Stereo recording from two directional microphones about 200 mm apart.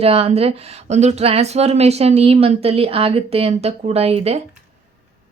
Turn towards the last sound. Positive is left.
turn(degrees=-30)  # may be behind; listen again after turning